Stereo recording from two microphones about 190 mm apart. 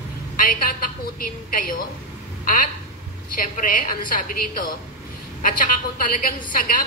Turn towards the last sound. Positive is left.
turn(degrees=45)  # may be behind; listen again after turning